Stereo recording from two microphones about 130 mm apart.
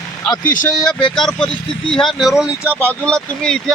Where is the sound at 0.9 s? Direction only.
5° left (ahead or behind).